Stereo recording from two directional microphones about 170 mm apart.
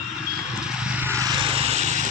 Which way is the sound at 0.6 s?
5° right (ahead or behind).